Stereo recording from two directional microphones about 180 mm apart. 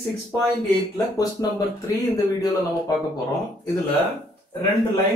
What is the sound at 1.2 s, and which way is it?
Speech, 20° left (ahead or behind).